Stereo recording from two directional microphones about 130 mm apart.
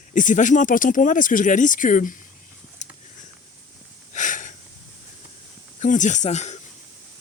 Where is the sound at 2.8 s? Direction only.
65° left (ahead or behind).